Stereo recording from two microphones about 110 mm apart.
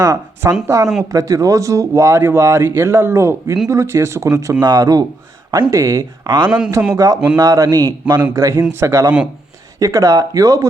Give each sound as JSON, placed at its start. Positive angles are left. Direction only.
{"t": 0.0, "sound": "a man's voice", "side_deg": -35}